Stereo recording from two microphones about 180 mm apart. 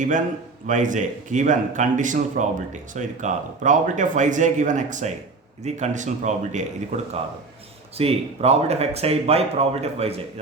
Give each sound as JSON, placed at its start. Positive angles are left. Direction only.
{"t": 0.7, "sound": "speech", "side_deg": -45}